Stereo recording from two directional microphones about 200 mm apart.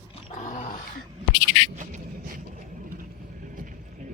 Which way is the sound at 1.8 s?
40° right (ahead or behind).